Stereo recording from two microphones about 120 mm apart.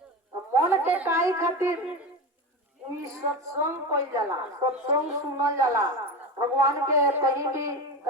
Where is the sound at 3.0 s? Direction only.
25° right (ahead or behind).